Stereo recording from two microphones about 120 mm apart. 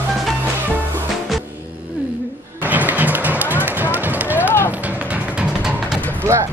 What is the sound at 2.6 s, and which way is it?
Music, 15° right (ahead or behind).